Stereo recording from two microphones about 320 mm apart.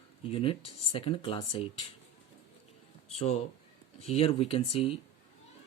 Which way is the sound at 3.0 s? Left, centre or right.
Centre.